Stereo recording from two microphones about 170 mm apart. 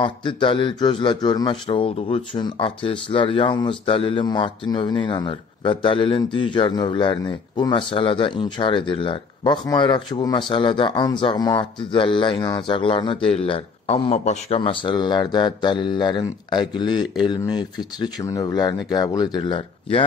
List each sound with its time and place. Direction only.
0.0 s speech: 30° left (ahead or behind)